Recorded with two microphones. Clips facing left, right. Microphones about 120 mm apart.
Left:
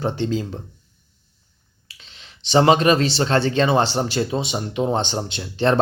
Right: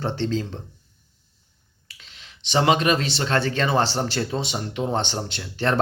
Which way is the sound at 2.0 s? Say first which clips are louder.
Left 1 dB; 30° left (ahead or behind).